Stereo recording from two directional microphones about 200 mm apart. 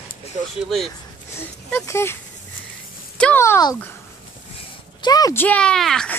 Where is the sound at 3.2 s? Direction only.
10° left (ahead or behind).